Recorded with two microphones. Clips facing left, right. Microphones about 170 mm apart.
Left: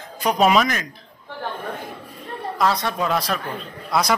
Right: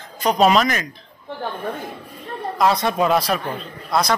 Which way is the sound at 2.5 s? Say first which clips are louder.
Right 3 dB; 20° right (ahead or behind).